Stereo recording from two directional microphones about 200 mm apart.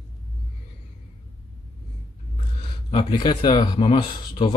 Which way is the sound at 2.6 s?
25° left (ahead or behind).